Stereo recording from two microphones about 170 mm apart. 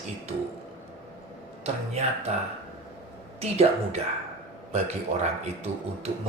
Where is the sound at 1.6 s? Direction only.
40° right (ahead or behind).